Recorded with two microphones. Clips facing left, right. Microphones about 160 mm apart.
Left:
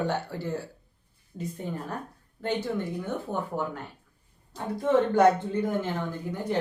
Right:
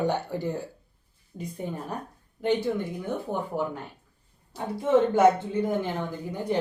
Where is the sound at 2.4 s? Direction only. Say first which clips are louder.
Right 3 dB; 15° right (ahead or behind).